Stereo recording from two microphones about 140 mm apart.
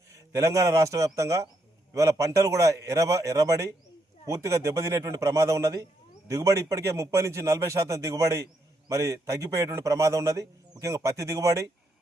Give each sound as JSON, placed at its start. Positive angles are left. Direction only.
{"t": 0.1, "sound": "a man's voice", "side_deg": -20}